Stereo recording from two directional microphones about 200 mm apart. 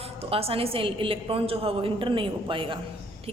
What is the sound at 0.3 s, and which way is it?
A woman's voice, 30° right (ahead or behind).